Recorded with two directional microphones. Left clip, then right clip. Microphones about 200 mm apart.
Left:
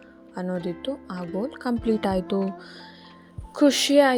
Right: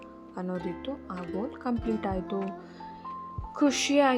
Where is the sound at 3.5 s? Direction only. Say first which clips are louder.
Left 6 dB; 25° left (ahead or behind).